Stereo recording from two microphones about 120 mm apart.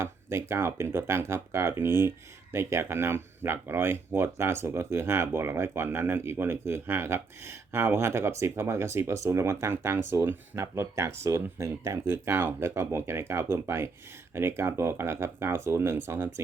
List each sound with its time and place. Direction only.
0.0 s speech: 20° right (ahead or behind)